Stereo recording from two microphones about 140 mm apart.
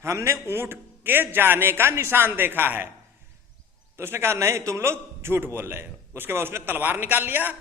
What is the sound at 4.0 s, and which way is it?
A man's voice, 15° right (ahead or behind).